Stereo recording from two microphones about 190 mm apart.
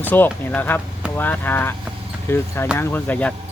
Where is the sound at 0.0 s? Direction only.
10° left (ahead or behind).